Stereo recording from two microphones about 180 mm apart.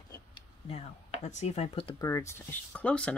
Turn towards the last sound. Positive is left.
turn(degrees=5)  # may be behind; listen again after turning